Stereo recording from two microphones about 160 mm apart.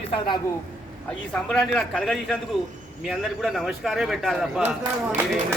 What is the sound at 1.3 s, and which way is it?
A man's voice, 5° left (ahead or behind).